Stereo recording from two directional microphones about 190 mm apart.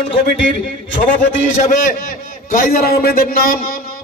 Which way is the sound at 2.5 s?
50° left (ahead or behind).